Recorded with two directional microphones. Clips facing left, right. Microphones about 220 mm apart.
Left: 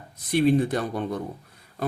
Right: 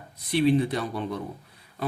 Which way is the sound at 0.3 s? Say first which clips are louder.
Left 1 dB; 45° left (ahead or behind).